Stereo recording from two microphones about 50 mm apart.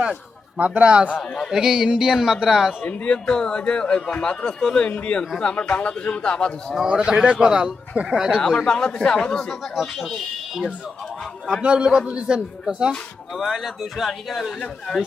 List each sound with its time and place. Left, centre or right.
0.5 s speech: right
1.2 s speech: centre
1.5 s a sound: centre
2.8 s a man's voice: left
6.8 s speech: centre
8.5 s speech: centre
9.5 s speech: centre
11.4 s speech: centre
13.3 s speech: centre